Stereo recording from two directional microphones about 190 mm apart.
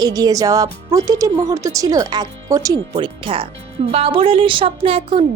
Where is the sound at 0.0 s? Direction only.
20° right (ahead or behind).